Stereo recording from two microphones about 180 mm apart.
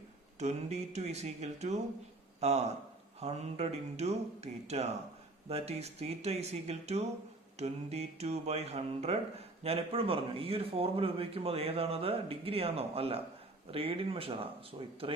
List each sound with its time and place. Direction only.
0.3 s a man's voice: 40° right (ahead or behind)